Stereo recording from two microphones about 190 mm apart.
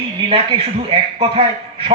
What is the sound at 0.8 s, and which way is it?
A man's voice, 30° right (ahead or behind).